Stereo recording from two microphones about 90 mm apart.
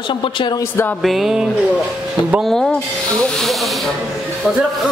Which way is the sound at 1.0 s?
Centre (ahead or behind).